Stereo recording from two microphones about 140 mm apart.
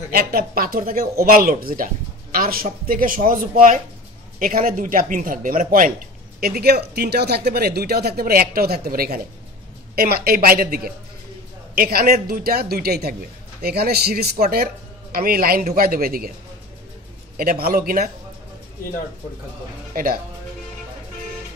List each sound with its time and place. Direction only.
0.1 s speech: 90° right
6.4 s speech: 90° right
17.4 s speech: 90° right
19.9 s speech: 80° right